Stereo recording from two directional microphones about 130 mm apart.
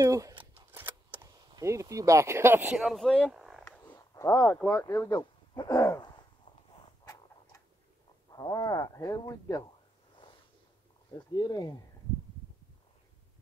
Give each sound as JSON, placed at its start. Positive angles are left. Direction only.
{"t": 0.0, "sound": "speech", "side_deg": -25}
{"t": 0.6, "sound": "a sound", "side_deg": -15}
{"t": 1.5, "sound": "speech", "side_deg": -25}
{"t": 2.8, "sound": "speech", "side_deg": 0}
{"t": 4.1, "sound": "a sound", "side_deg": 25}
{"t": 4.4, "sound": "speech", "side_deg": 5}
{"t": 4.6, "sound": "speech", "side_deg": 20}
{"t": 8.3, "sound": "speech", "side_deg": 30}
{"t": 11.1, "sound": "speech", "side_deg": 30}